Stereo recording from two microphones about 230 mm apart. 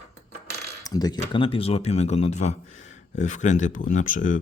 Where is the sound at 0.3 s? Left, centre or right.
Right.